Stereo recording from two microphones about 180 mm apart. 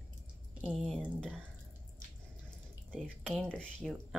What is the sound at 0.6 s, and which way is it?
Speech, 5° left (ahead or behind).